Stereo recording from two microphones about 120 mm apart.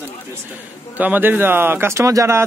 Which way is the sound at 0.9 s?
15° right (ahead or behind).